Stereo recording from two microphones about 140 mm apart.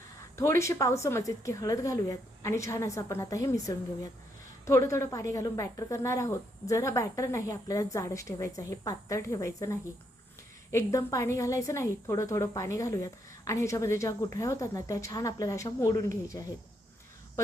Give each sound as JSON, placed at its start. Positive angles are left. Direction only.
{"t": 0.3, "sound": "a woman's voice", "side_deg": 20}